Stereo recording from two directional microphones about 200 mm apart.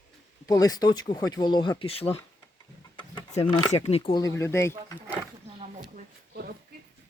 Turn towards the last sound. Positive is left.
turn(degrees=-45)  # may be behind; listen again after turning